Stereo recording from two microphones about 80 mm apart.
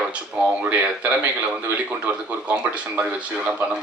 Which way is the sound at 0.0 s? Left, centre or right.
Centre.